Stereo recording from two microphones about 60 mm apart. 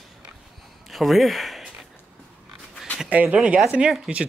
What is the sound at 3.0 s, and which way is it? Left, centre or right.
Speech, right.